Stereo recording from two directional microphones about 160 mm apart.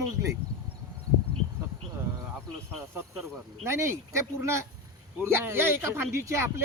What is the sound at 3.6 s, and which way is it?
Speech, 15° right (ahead or behind).